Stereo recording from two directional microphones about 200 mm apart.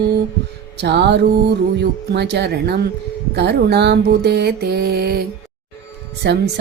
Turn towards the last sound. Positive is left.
turn(degrees=-60)  # may be behind; listen again after turning